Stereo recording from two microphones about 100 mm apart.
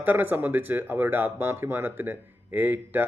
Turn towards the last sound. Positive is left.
turn(degrees=-20)  # may be behind; listen again after turning